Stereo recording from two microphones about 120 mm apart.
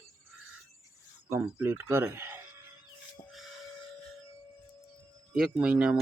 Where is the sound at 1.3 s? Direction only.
20° right (ahead or behind).